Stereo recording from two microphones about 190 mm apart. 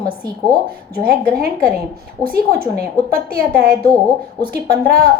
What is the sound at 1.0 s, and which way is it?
A woman's voice, 50° right (ahead or behind).